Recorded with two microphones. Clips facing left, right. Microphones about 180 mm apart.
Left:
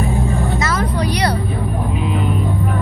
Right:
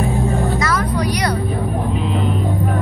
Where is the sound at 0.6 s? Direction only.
25° left (ahead or behind).